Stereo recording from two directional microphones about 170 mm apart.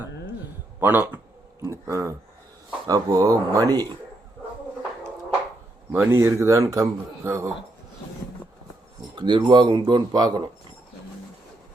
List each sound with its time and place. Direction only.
0.8 s speech: 10° right (ahead or behind)
5.9 s speech: 10° right (ahead or behind)
9.1 s speech: 25° right (ahead or behind)